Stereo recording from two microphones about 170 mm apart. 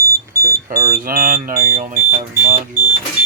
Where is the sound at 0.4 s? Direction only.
55° right (ahead or behind).